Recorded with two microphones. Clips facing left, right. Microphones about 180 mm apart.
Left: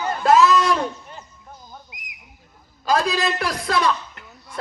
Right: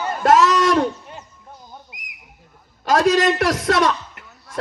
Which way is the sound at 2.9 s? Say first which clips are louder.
Right 5 dB; 80° right.